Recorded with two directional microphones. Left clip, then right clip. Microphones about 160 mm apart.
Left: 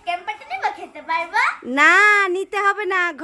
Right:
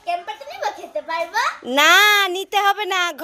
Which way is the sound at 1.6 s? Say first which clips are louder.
Right 1 dB; centre (ahead or behind).